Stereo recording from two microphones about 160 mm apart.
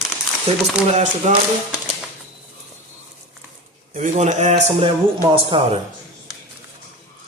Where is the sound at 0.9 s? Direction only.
45° right (ahead or behind).